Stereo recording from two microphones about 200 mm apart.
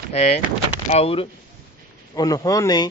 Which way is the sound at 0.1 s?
35° left (ahead or behind).